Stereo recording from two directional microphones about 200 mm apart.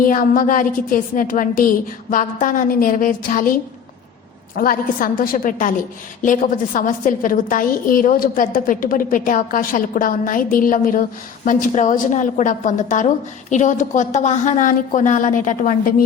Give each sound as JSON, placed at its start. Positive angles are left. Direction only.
{"t": 0.0, "sound": "a woman's voice", "side_deg": 45}
{"t": 4.5, "sound": "a woman's voice", "side_deg": 45}